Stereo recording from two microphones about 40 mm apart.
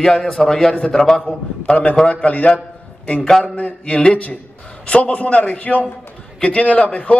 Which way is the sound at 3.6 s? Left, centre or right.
Left.